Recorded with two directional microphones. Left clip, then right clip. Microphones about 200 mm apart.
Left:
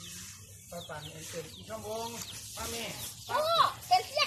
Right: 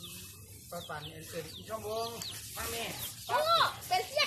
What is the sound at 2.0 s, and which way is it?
Speech, centre (ahead or behind).